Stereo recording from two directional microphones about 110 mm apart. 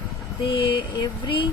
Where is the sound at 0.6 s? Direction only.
45° left (ahead or behind).